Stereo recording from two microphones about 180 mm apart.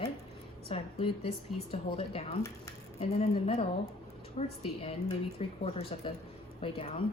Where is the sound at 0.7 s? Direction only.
35° left (ahead or behind).